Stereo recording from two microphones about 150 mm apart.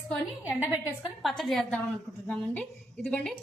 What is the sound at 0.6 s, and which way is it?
Speech, 10° right (ahead or behind).